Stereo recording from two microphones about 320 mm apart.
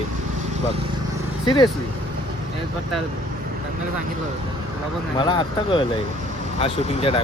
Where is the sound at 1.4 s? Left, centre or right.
Centre.